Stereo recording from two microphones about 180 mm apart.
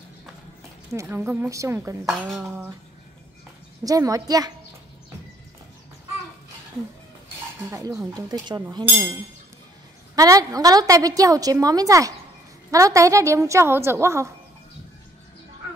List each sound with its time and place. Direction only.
0.9 s a woman's voice: 15° right (ahead or behind)
2.0 s dishes: centre (ahead or behind)
3.8 s a woman's voice: 20° right (ahead or behind)
7.7 s a woman's voice: 15° right (ahead or behind)
10.1 s a woman's voice: 20° right (ahead or behind)